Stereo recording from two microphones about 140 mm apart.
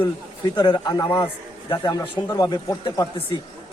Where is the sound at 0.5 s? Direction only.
30° left (ahead or behind).